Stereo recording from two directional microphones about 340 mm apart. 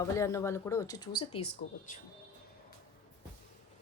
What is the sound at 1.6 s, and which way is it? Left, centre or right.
Speech, left.